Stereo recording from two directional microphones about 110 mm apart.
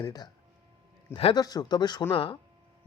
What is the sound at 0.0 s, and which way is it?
Speech, 40° left (ahead or behind).